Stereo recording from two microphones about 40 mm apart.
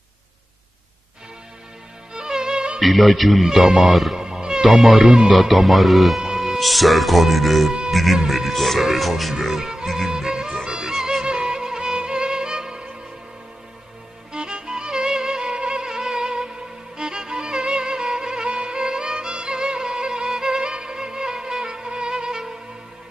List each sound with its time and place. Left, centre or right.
2.1 s music: centre
2.8 s speech: centre
3.5 s speech: centre
4.2 s cat: centre
4.6 s speech: centre
5.3 s speech: centre
6.2 s music: centre
6.5 s speech: centre
10.0 s music: centre
14.3 s music: right